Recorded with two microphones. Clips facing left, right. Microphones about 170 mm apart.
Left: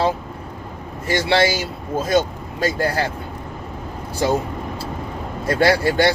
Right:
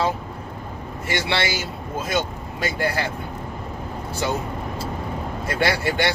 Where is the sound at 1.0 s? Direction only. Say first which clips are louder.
Left 7 dB; 40° left (ahead or behind).